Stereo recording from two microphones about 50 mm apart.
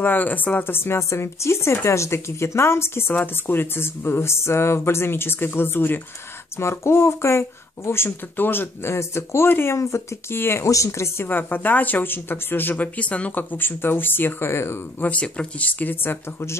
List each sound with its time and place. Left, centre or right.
0.0 s speech: left
0.7 s speech: left
0.9 s speech: left
6.6 s speech: left
9.8 s speech: left
10.3 s speech: left
10.7 s speech: left
11.2 s speech: left
12.7 s speech: left
14.5 s speech: left
15.0 s speech: left